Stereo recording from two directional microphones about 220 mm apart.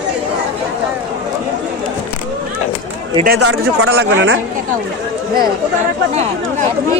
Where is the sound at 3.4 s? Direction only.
75° right (ahead or behind).